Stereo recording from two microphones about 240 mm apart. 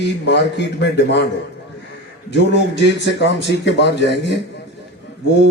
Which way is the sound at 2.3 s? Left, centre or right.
Left.